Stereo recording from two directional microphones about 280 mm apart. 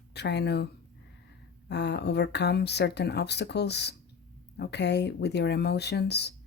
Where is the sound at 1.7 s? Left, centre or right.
Left.